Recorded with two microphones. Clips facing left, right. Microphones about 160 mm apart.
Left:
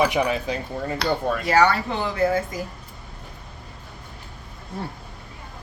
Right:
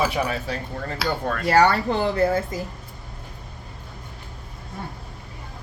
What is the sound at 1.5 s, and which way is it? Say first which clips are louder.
Speech: right 2 dB; 40° right (ahead or behind).